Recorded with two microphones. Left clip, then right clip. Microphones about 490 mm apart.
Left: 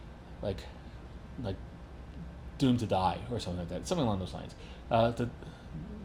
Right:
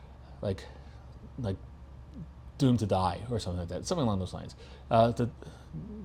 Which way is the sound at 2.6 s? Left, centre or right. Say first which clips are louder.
Right 1 dB; right.